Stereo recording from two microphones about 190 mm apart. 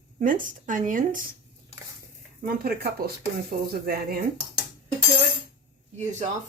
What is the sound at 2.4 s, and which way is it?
Speech, 50° right (ahead or behind).